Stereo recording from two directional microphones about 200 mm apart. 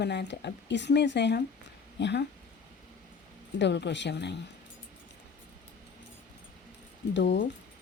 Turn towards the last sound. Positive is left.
turn(degrees=60)  # may be behind; listen again after turning